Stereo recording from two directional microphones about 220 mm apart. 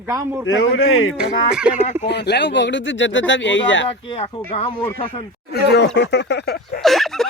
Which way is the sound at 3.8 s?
25° left (ahead or behind).